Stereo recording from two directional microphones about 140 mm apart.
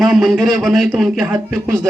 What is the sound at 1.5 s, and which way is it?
Speech, 20° right (ahead or behind).